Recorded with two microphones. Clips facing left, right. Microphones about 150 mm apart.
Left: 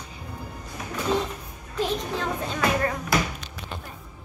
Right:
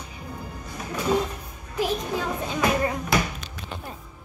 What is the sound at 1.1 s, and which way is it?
Music, 10° right (ahead or behind).